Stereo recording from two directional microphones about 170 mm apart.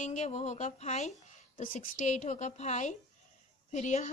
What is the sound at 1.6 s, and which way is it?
A woman's voice, 55° left (ahead or behind).